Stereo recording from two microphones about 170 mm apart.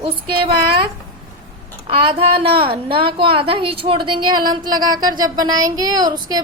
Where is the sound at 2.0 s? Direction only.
35° right (ahead or behind).